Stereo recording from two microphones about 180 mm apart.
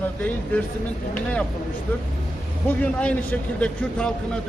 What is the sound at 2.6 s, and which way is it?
Speech, 5° left (ahead or behind).